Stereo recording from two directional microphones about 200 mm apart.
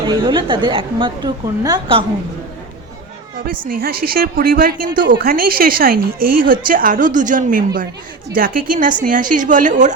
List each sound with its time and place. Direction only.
0.1 s a woman's voice: 25° right (ahead or behind)
3.7 s a woman's voice: 50° right (ahead or behind)
5.0 s speech: 65° right (ahead or behind)
5.3 s a woman's voice: 45° right (ahead or behind)